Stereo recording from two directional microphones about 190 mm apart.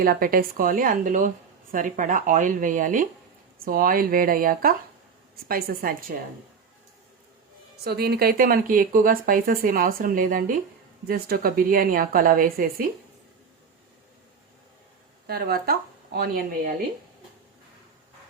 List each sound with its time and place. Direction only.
0.0 s speech: 50° right (ahead or behind)
7.9 s speech: 55° right (ahead or behind)
15.3 s speech: 55° right (ahead or behind)